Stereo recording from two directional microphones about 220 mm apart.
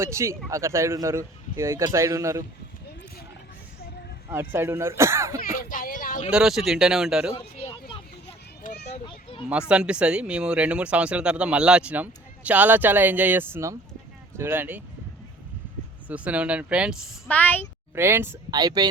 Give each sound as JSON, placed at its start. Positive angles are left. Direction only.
{"t": 0.0, "sound": "speech", "side_deg": -10}
{"t": 4.3, "sound": "speech", "side_deg": -10}
{"t": 5.4, "sound": "a sound", "side_deg": 40}
{"t": 6.3, "sound": "speech", "side_deg": 0}
{"t": 7.3, "sound": "a sound", "side_deg": 25}
{"t": 8.9, "sound": "children playing", "side_deg": 25}
{"t": 9.5, "sound": "speech", "side_deg": -5}
{"t": 16.0, "sound": "speech", "side_deg": -5}
{"t": 17.2, "sound": "speech", "side_deg": 10}
{"t": 17.9, "sound": "speech", "side_deg": -10}